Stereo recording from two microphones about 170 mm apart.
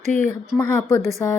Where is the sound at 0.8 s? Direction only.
15° left (ahead or behind).